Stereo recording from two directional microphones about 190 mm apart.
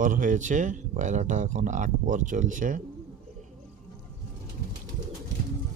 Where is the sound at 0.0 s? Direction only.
45° right (ahead or behind).